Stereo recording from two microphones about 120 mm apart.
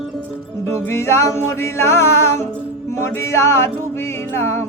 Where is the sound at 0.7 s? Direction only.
20° left (ahead or behind).